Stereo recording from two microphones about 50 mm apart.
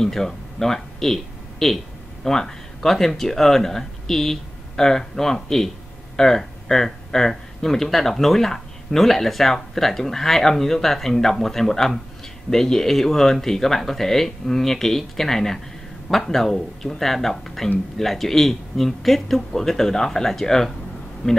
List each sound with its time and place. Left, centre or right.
0.0 s speech: centre